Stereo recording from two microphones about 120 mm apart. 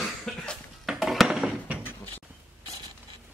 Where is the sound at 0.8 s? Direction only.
5° right (ahead or behind).